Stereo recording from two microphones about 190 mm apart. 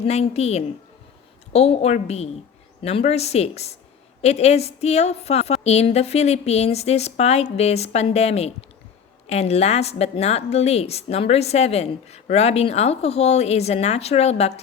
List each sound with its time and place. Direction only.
0.0 s speech: 35° left (ahead or behind)